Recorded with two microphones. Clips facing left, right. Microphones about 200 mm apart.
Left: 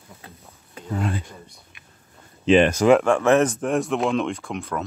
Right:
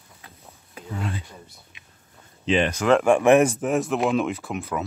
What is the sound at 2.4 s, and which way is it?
Speech, 55° left (ahead or behind).